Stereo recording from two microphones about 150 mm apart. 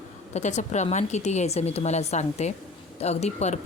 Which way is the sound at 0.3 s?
50° left (ahead or behind).